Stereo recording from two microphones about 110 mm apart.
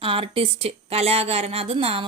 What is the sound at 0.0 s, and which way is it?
A woman's voice, 55° right (ahead or behind).